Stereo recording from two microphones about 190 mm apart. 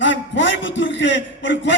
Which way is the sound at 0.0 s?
75° left (ahead or behind).